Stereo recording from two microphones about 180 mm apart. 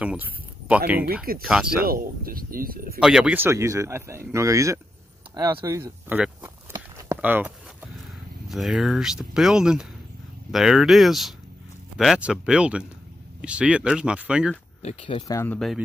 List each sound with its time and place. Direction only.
0.0 s speech: 5° right (ahead or behind)
1.9 s speech: 55° right (ahead or behind)
3.0 s speech: 5° right (ahead or behind)
5.3 s walk: 20° right (ahead or behind)
8.5 s speech: centre (ahead or behind)
14.8 s speech: 35° left (ahead or behind)
15.2 s speech: 15° left (ahead or behind)